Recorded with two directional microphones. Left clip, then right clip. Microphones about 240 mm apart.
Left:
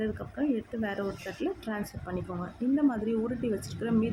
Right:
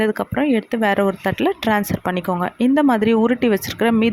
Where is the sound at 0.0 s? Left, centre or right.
Right.